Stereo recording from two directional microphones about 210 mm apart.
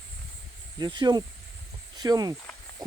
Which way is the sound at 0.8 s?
20° right (ahead or behind).